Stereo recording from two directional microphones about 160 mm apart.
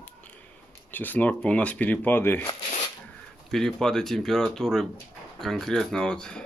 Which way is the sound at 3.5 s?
5° left (ahead or behind).